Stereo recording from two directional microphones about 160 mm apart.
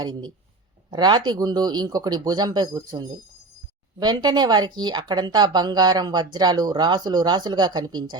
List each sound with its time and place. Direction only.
0.0 s speech: 25° right (ahead or behind)